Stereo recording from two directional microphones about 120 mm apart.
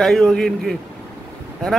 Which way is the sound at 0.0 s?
5° left (ahead or behind).